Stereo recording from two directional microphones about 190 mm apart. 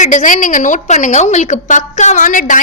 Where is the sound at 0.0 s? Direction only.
40° left (ahead or behind).